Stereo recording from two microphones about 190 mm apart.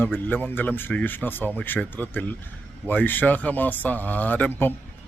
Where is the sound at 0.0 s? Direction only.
10° left (ahead or behind).